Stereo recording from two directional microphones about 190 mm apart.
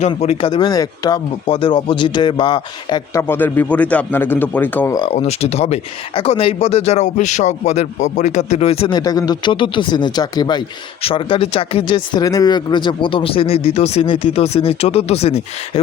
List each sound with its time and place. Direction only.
0.0 s speech: 35° left (ahead or behind)
3.2 s a man's voice: 10° left (ahead or behind)
4.9 s speech: 30° left (ahead or behind)